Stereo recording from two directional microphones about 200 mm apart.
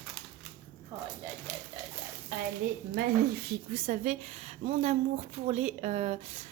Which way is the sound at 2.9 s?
55° right (ahead or behind).